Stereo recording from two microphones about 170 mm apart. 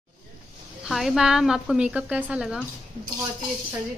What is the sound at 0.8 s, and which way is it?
A woman's voice, centre (ahead or behind).